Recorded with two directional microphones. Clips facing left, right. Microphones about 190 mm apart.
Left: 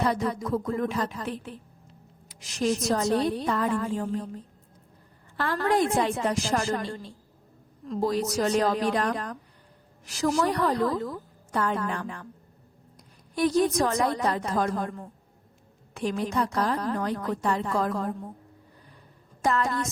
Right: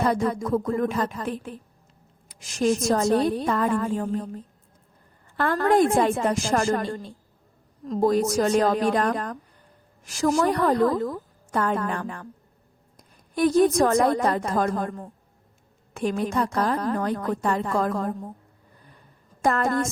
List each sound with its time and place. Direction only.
0.0 s a woman's voice: 50° right (ahead or behind)
5.4 s a woman's voice: 50° right (ahead or behind)
13.3 s a woman's voice: 50° right (ahead or behind)
19.4 s a woman's voice: 50° right (ahead or behind)